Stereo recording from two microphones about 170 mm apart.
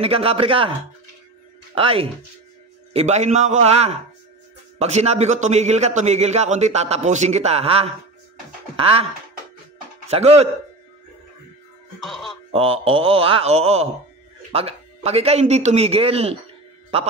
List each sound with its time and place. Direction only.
0.0 s a man's voice: 35° right (ahead or behind)
1.8 s a man's voice: 35° right (ahead or behind)
10.0 s speech: 40° right (ahead or behind)
12.0 s speech: centre (ahead or behind)
12.4 s a man's voice: 35° right (ahead or behind)